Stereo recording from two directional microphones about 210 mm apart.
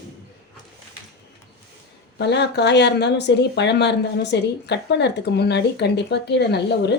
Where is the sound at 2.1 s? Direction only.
55° left (ahead or behind).